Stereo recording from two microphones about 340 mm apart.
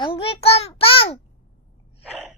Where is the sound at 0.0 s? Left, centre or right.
Centre.